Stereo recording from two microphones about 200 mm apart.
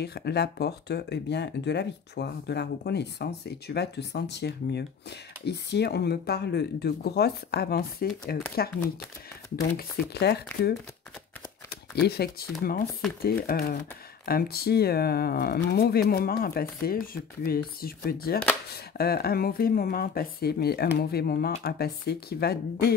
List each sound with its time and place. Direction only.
0.0 s speech: 55° left (ahead or behind)
11.7 s speech: 55° left (ahead or behind)